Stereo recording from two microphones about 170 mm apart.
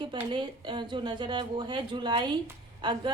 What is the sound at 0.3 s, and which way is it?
A woman's voice, 25° right (ahead or behind).